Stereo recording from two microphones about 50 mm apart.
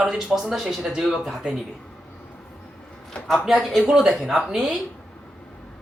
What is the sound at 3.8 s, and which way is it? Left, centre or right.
Speech, centre.